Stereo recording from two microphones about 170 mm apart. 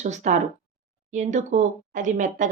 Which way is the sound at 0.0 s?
45° right (ahead or behind).